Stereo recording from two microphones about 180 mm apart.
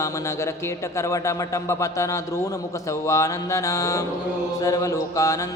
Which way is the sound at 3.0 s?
15° left (ahead or behind).